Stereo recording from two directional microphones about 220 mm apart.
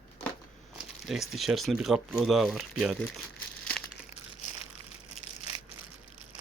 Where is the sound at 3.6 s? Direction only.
5° left (ahead or behind).